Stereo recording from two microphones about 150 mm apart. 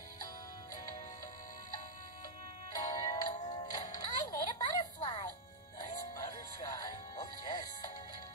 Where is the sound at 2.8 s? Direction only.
30° left (ahead or behind).